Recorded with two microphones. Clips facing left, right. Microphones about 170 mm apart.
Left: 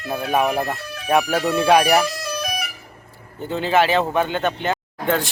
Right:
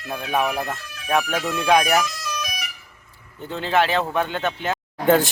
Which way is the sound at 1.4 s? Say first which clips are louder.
Left 3 dB; 35° left (ahead or behind).